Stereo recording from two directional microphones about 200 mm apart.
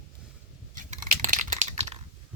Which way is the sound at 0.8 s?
40° right (ahead or behind).